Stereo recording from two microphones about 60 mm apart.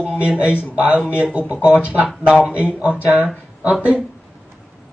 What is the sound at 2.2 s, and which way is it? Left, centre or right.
Speech, centre.